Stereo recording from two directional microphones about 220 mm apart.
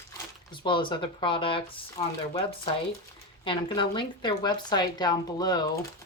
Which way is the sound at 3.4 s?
20° left (ahead or behind).